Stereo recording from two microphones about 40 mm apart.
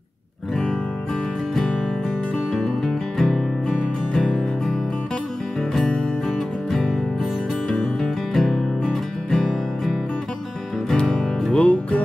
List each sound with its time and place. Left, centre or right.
1.5 s music: centre
4.1 s music: centre
8.0 s music: centre
11.5 s music: left